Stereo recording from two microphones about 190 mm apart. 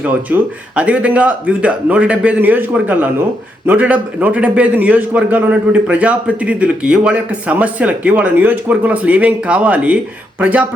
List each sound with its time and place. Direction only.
0.3 s a man's voice: 10° right (ahead or behind)